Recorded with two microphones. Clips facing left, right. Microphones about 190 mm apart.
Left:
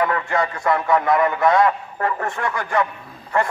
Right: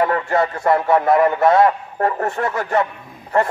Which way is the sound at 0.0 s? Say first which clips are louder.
Right 3 dB; 30° right (ahead or behind).